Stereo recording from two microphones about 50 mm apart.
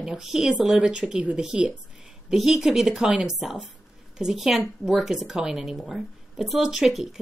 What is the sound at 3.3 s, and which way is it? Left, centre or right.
A woman's voice, centre.